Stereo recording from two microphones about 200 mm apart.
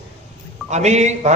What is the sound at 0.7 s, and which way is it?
Speech, 35° right (ahead or behind).